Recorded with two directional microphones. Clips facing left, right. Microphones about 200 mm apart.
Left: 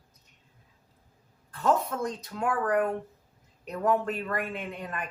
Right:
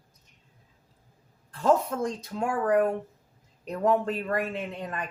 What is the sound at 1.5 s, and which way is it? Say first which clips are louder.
A woman's voice: right 3 dB; 30° right (ahead or behind).